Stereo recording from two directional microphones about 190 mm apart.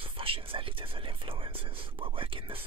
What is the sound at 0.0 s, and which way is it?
Speech, 30° right (ahead or behind).